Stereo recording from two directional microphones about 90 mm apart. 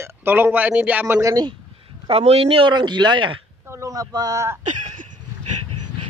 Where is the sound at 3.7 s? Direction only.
40° right (ahead or behind).